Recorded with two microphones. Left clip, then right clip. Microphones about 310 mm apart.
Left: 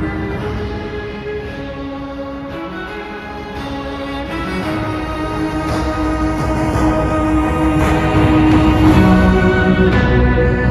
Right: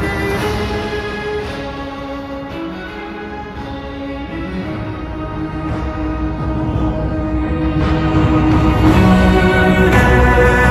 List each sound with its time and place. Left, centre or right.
5.7 s music: left
7.0 s music: left; by 10.7 s right